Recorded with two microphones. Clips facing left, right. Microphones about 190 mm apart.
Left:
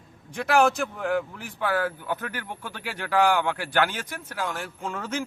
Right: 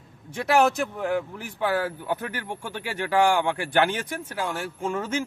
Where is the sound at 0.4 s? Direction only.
Centre (ahead or behind).